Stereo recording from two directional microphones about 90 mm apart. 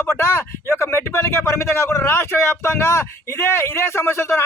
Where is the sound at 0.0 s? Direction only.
25° left (ahead or behind).